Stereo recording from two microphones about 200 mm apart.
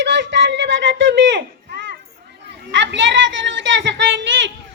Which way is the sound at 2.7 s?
65° right (ahead or behind).